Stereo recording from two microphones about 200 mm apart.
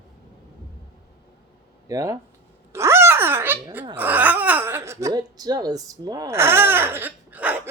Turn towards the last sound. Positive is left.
turn(degrees=-10)  # may be behind; listen again after turning